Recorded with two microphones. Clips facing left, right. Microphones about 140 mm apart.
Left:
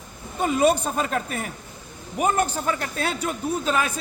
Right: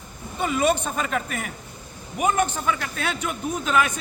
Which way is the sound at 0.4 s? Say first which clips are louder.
Left 2 dB; 40° left (ahead or behind).